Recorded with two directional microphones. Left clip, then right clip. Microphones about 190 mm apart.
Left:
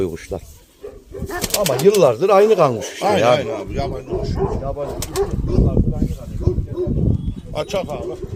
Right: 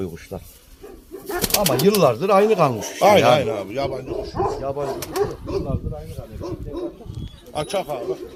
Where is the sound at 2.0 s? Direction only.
35° left (ahead or behind).